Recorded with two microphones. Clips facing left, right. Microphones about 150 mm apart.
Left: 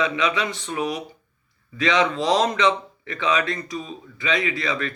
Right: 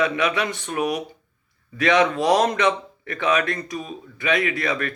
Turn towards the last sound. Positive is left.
turn(degrees=-55)  # may be behind; listen again after turning